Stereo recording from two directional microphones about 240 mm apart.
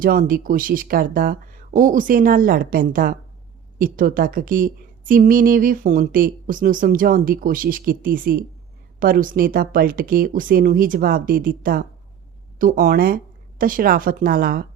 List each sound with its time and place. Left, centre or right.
0.0 s a woman's voice: right